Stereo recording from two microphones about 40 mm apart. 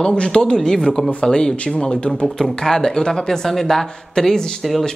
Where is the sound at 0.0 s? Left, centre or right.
Left.